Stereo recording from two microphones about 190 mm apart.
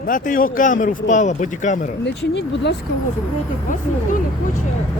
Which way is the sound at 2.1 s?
65° left (ahead or behind).